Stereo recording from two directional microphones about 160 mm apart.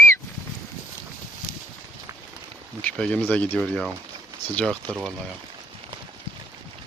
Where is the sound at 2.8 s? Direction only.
5° left (ahead or behind).